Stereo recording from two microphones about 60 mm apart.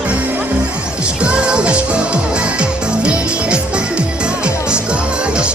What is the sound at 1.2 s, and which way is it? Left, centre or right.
Music, centre.